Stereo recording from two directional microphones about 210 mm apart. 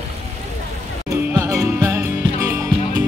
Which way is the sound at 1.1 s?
15° right (ahead or behind).